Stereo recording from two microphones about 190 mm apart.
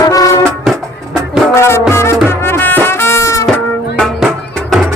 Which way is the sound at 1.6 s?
15° left (ahead or behind).